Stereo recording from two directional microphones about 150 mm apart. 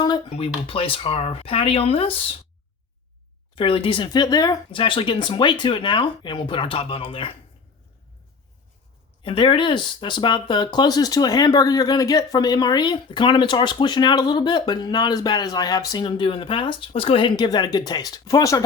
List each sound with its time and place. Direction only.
0.3 s speech: 40° left (ahead or behind)
3.5 s speech: 35° left (ahead or behind)
9.2 s speech: 35° left (ahead or behind)